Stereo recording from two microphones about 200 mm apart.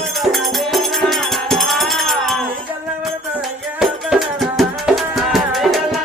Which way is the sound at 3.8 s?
Centre (ahead or behind).